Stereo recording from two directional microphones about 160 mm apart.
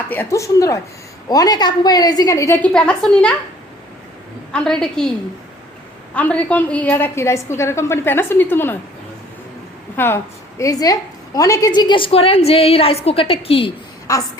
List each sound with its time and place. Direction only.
0.1 s a woman's voice: 15° left (ahead or behind)
2.6 s a woman's voice: 5° left (ahead or behind)
4.5 s a woman's voice: 5° left (ahead or behind)
6.1 s a woman's voice: 10° left (ahead or behind)
10.0 s a woman's voice: 15° left (ahead or behind); by 13.7 s 35° left (ahead or behind)
14.1 s a woman's voice: 20° left (ahead or behind)